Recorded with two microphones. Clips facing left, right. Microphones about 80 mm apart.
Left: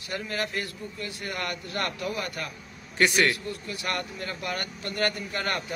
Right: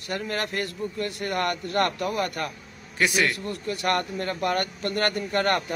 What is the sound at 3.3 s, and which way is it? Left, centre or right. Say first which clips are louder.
Speech: right 5 dB; right.